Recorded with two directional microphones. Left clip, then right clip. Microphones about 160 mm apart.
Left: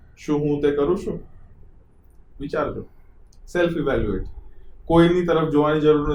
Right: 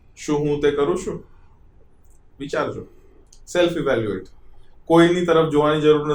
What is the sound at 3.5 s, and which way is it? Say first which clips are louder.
Speech: right 2 dB; 50° right (ahead or behind).